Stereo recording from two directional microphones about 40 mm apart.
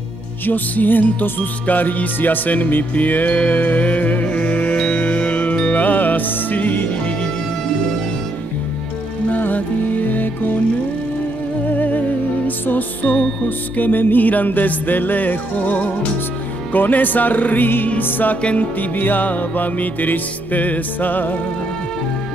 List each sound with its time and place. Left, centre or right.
0.5 s music: left
9.3 s music: left
11.6 s music: left
18.4 s music: left